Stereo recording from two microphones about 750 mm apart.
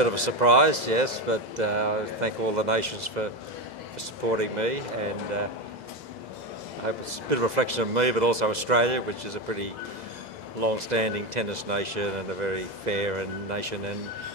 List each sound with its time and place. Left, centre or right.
0.0 s speech: right
4.3 s speech: right
6.9 s speech: right